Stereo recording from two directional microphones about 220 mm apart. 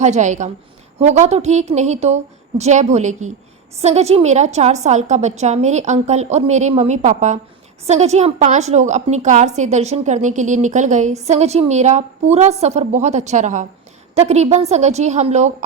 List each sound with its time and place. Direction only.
0.0 s a woman's voice: 30° right (ahead or behind)